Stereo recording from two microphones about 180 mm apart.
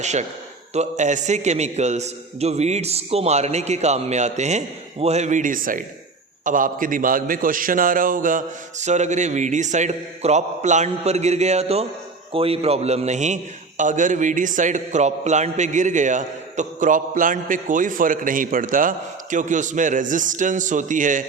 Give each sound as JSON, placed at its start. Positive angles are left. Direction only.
{"t": 0.0, "sound": "a man's voice", "side_deg": -40}